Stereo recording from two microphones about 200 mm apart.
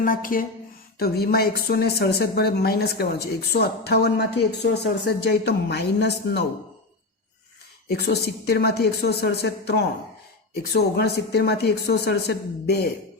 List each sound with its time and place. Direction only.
0.0 s a woman's voice: 45° left (ahead or behind)
7.9 s a woman's voice: 55° left (ahead or behind)